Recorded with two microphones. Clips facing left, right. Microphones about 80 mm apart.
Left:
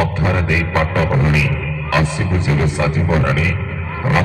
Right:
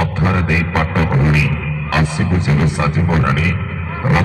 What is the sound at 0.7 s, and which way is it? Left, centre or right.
Speech, centre.